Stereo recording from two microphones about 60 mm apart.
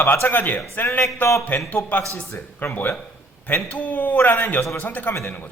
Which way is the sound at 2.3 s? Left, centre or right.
Left.